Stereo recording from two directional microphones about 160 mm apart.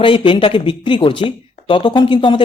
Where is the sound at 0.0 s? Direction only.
30° left (ahead or behind).